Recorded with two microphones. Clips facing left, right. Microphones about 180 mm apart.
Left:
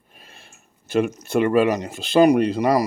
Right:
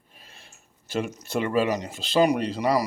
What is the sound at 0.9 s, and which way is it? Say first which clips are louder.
Speech: left 8 dB; 60° left (ahead or behind).